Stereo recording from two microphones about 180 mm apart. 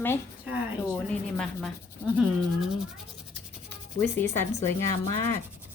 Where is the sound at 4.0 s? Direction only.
10° left (ahead or behind).